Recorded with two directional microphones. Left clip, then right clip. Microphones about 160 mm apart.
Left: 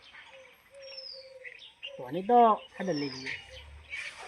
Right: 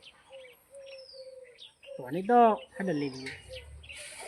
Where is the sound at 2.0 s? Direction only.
10° right (ahead or behind).